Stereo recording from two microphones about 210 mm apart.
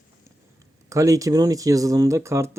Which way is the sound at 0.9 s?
15° right (ahead or behind).